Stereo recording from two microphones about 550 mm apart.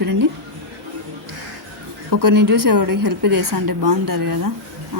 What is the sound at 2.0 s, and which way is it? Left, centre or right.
A woman's voice, right.